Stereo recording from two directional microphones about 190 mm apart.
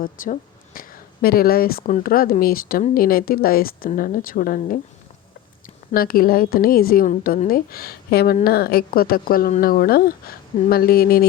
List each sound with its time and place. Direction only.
0.0 s speech: 45° left (ahead or behind)
5.9 s speech: 50° left (ahead or behind)